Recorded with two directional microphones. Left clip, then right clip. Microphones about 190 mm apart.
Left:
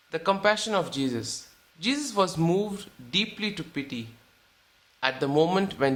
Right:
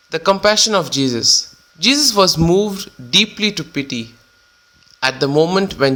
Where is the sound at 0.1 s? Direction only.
30° right (ahead or behind).